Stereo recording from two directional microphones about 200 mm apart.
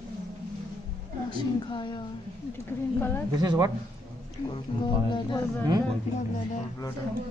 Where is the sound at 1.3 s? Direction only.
25° left (ahead or behind).